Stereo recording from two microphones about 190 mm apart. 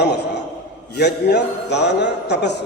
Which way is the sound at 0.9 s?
60° left (ahead or behind).